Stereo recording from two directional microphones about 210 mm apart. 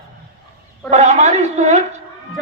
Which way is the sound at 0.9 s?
30° right (ahead or behind).